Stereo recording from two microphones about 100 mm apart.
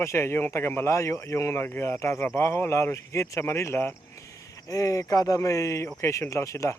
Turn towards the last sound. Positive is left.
turn(degrees=30)  # may be behind; listen again after turning